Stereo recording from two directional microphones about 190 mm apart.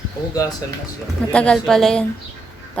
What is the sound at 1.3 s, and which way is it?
Speech, 5° left (ahead or behind).